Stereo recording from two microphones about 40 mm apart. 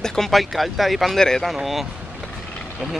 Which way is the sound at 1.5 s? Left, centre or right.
Centre.